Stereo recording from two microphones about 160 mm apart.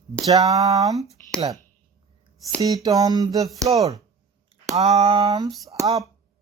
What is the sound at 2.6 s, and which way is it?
Humming, 20° right (ahead or behind).